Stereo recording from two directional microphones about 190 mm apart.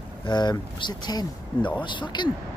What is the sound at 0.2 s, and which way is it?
Speech, 25° left (ahead or behind).